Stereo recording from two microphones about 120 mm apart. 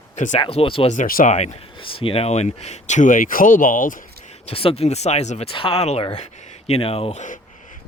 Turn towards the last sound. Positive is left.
turn(degrees=55)  # may be behind; listen again after turning